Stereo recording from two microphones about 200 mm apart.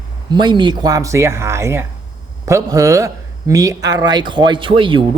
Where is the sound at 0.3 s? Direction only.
20° right (ahead or behind).